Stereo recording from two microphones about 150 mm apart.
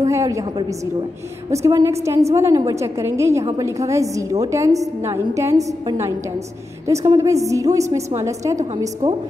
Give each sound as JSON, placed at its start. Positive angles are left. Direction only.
{"t": 0.0, "sound": "a woman's voice", "side_deg": -20}
{"t": 7.2, "sound": "a woman's voice", "side_deg": -20}